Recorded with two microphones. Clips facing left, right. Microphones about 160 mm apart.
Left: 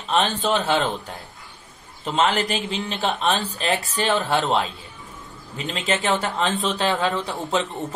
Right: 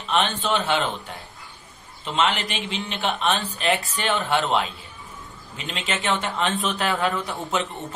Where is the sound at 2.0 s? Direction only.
40° left (ahead or behind); by 7.4 s 25° left (ahead or behind).